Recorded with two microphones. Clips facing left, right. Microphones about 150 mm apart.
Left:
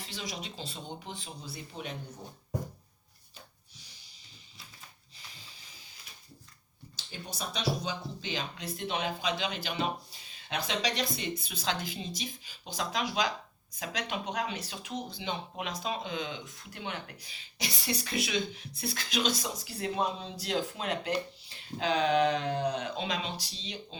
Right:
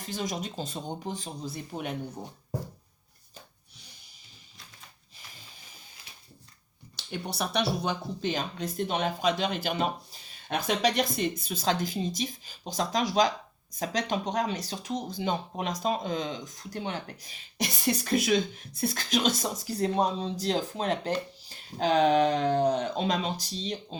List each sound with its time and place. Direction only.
0.0 s speech: 45° right (ahead or behind)
6.9 s speech: 65° right (ahead or behind); by 24.0 s 40° right (ahead or behind)